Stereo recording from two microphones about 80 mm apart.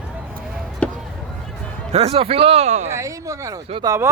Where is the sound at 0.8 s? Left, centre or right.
Centre.